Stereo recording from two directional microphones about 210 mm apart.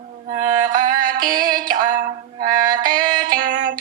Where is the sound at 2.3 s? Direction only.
20° right (ahead or behind).